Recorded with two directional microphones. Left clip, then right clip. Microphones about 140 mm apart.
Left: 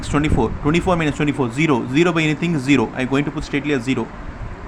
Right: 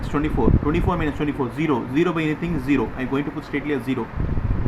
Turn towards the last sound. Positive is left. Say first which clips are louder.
# left 4 dB
turn(degrees=55)  # may be behind; listen again after turning